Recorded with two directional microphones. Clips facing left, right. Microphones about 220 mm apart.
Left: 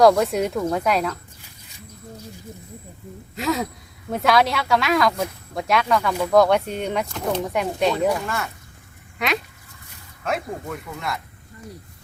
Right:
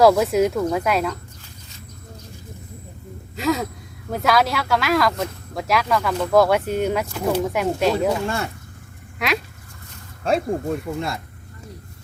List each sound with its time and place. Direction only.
0.0 s speech: 5° right (ahead or behind)
3.3 s speech: centre (ahead or behind)
8.1 s speech: 30° right (ahead or behind)
9.1 s speech: centre (ahead or behind)
10.2 s speech: 30° right (ahead or behind)